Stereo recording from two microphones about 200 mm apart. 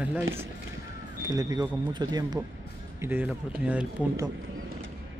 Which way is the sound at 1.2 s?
20° right (ahead or behind).